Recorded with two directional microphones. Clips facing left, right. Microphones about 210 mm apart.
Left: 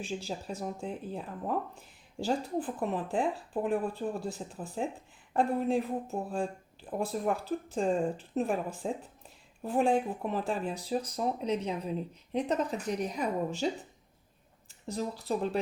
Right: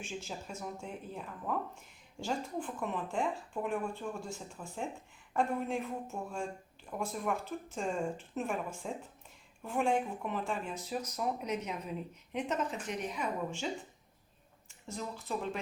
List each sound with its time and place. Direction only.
0.0 s speech: 35° left (ahead or behind)
14.7 s speech: 35° left (ahead or behind)